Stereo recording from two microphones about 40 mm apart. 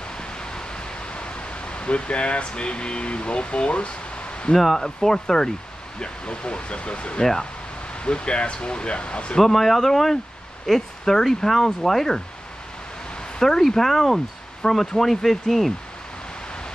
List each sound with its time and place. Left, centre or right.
0.2 s a sound: centre
4.6 s speech: centre
4.8 s speech: centre
7.2 s speech: centre
9.4 s speech: centre
13.4 s speech: centre